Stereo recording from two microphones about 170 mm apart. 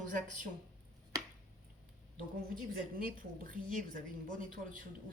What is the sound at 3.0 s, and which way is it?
A woman's voice, 55° right (ahead or behind).